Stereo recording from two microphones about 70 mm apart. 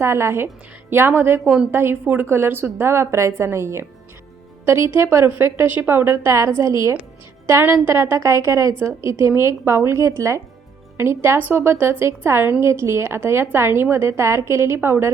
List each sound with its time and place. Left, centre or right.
0.0 s a woman's voice: right
5.6 s a woman's voice: right
6.6 s a woman's voice: right
7.6 s a woman's voice: right
11.3 s a woman's voice: right